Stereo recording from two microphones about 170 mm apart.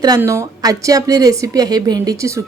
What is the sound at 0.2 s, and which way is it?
A woman's voice, 15° right (ahead or behind).